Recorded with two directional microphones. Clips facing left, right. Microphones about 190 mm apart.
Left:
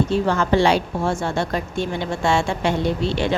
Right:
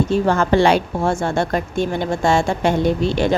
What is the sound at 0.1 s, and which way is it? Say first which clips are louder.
A woman's voice: right 3 dB; 50° right (ahead or behind).